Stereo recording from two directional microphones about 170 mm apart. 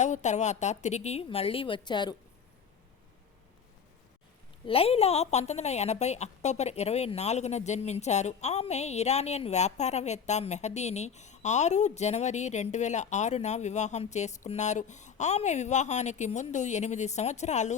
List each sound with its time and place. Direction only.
0.0 s a woman's voice: 45° left (ahead or behind); by 2.1 s 25° left (ahead or behind)
4.6 s a woman's voice: 35° left (ahead or behind)